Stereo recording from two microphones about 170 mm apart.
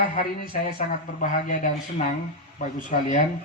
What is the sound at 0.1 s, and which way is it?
Speech, 55° left (ahead or behind).